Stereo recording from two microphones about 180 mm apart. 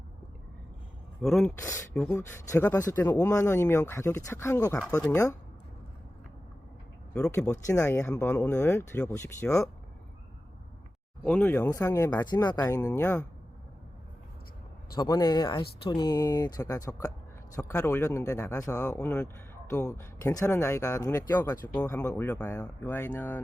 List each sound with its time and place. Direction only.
1.2 s speech: centre (ahead or behind)
1.5 s speech: 15° left (ahead or behind)
7.1 s speech: 10° left (ahead or behind)
11.3 s speech: 10° left (ahead or behind)
14.9 s speech: 20° left (ahead or behind)